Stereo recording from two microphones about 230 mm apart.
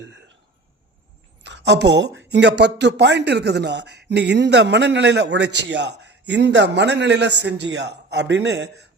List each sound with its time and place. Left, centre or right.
1.5 s speech: right